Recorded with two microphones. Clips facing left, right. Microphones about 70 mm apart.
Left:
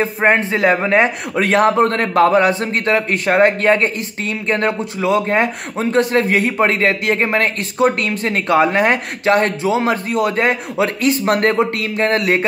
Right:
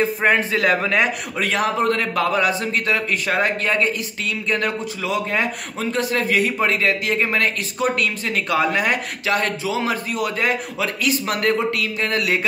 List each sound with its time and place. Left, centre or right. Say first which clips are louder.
0.2 s a man's voice: left 6 dB; left